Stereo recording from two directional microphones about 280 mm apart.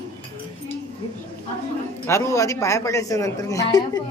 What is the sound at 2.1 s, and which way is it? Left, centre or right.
A woman's voice, centre.